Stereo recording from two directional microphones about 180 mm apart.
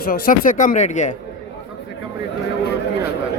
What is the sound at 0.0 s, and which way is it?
Speech, 50° left (ahead or behind).